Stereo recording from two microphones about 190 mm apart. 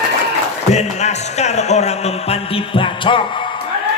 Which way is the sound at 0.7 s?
35° left (ahead or behind).